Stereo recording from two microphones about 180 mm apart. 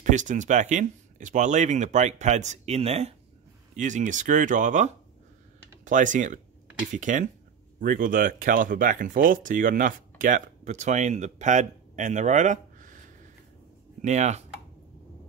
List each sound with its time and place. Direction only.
0.0 s speech: 45° right (ahead or behind)